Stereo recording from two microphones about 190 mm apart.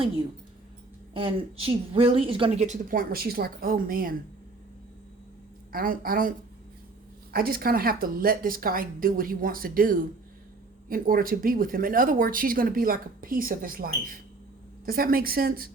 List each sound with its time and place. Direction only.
1.1 s a woman's voice: 30° right (ahead or behind); by 4.1 s 50° right (ahead or behind)
5.7 s speech: 50° right (ahead or behind)
7.3 s speech: 50° right (ahead or behind)